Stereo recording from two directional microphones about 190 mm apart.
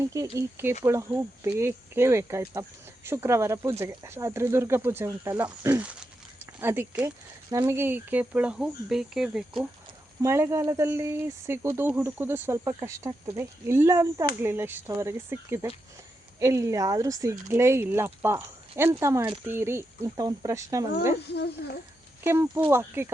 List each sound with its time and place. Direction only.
0.0 s speech: 15° right (ahead or behind)
10.2 s speech: 15° right (ahead or behind)
21.3 s speech: 60° left (ahead or behind)
22.2 s speech: 10° right (ahead or behind)